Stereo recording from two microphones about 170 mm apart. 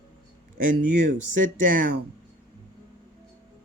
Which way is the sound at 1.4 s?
55° right (ahead or behind).